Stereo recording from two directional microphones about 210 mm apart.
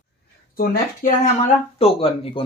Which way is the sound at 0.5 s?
40° left (ahead or behind).